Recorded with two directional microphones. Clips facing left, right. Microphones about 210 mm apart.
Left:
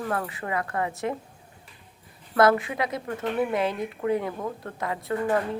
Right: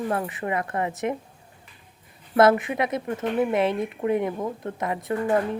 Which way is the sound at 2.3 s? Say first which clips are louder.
Right 2 dB; 20° right (ahead or behind).